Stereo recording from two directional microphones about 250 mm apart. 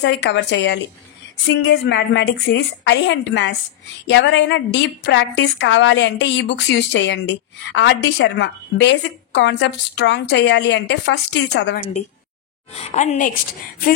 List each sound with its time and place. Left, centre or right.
0.0 s a woman's voice: left
12.7 s a woman's voice: left